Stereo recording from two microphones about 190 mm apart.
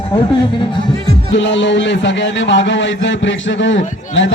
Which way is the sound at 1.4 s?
75° left (ahead or behind).